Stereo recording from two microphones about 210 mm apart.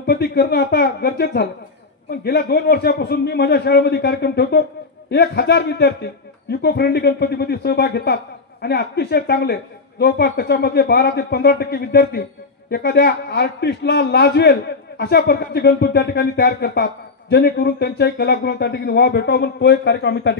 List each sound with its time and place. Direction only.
0.0 s speech: 50° left (ahead or behind)